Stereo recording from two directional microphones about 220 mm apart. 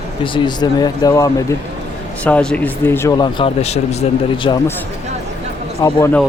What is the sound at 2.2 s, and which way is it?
Speech, 5° left (ahead or behind).